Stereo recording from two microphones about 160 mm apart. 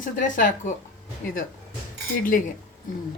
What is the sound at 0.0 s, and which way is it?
Speech, 55° left (ahead or behind).